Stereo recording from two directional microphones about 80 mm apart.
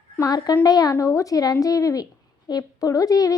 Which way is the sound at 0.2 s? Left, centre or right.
Left.